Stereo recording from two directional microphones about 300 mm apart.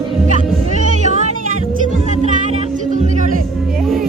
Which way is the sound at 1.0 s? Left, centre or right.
Right.